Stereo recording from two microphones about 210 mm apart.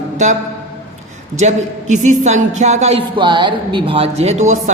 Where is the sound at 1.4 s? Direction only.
35° right (ahead or behind).